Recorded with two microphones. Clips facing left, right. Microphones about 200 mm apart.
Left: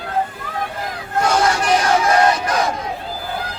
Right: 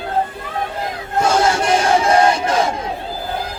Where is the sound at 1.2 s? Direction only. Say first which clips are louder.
Right 1 dB; 25° right (ahead or behind).